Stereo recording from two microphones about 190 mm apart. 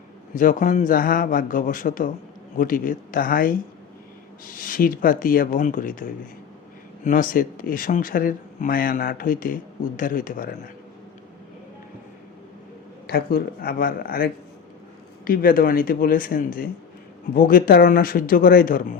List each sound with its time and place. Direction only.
0.3 s speech: 45° left (ahead or behind)
13.1 s speech: 55° left (ahead or behind)